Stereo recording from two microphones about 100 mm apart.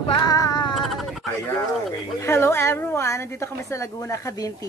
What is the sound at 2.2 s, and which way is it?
A woman's voice, 25° left (ahead or behind).